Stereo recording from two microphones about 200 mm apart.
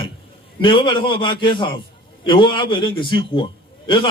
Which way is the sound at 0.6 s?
25° left (ahead or behind).